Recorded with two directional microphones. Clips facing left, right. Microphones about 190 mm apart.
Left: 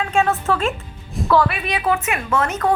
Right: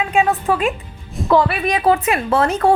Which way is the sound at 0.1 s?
15° right (ahead or behind).